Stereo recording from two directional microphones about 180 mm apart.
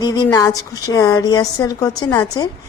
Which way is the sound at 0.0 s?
20° left (ahead or behind).